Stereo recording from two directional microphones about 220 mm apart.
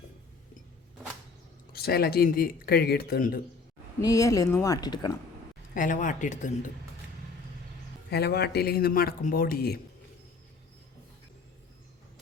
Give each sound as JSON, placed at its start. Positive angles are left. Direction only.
{"t": 1.7, "sound": "speech", "side_deg": 45}
{"t": 4.0, "sound": "speech", "side_deg": 15}
{"t": 5.7, "sound": "speech", "side_deg": 35}
{"t": 8.1, "sound": "speech", "side_deg": 45}